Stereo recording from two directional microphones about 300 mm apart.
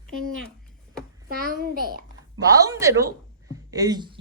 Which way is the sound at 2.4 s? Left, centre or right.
Centre.